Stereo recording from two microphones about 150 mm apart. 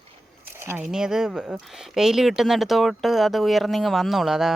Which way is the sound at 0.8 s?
5° right (ahead or behind).